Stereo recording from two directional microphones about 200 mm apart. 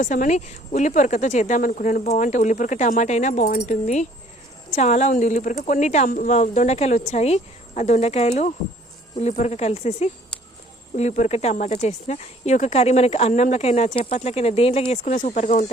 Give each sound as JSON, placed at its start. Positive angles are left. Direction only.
{"t": 0.0, "sound": "speech", "side_deg": 40}